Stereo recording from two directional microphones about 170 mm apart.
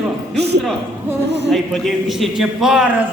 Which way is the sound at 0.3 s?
75° right (ahead or behind).